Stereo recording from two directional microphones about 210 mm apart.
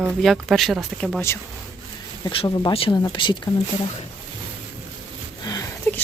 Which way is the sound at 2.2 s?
25° left (ahead or behind).